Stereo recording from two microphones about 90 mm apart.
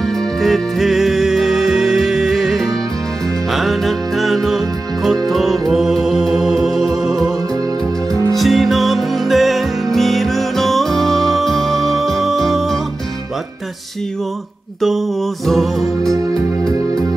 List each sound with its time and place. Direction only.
0.4 s music: centre (ahead or behind)
8.1 s music: 40° right (ahead or behind)
8.4 s music: centre (ahead or behind)
15.4 s music: centre (ahead or behind)